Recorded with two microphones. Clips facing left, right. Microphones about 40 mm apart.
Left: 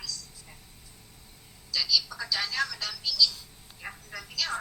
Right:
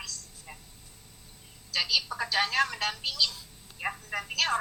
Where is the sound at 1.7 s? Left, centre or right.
Right.